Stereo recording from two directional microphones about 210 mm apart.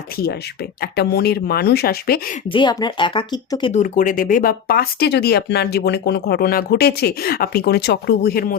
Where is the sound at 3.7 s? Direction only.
40° left (ahead or behind).